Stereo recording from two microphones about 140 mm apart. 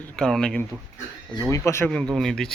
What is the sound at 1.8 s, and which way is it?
Speech, 5° left (ahead or behind).